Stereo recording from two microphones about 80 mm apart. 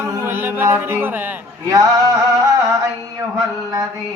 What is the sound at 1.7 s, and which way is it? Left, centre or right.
Music, right.